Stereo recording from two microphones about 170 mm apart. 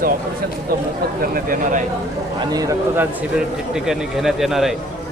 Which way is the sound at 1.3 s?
50° right (ahead or behind).